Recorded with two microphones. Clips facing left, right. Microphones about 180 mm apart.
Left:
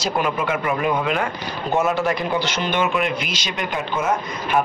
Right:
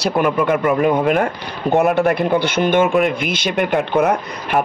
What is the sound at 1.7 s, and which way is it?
A man's voice, 60° right (ahead or behind).